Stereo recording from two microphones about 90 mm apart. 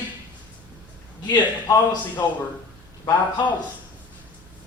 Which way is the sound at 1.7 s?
50° left (ahead or behind).